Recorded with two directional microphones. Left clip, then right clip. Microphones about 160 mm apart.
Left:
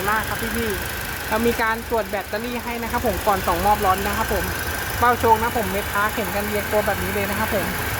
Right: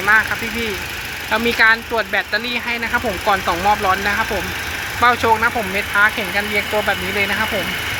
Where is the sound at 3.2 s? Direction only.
15° right (ahead or behind).